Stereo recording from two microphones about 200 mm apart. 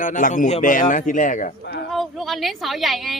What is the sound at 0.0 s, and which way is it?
A man's voice, 40° left (ahead or behind).